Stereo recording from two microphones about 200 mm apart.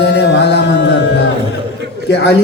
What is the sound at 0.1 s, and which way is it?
Music, 60° left (ahead or behind).